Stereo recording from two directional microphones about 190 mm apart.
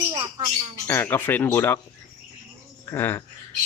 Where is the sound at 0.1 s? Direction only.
25° right (ahead or behind).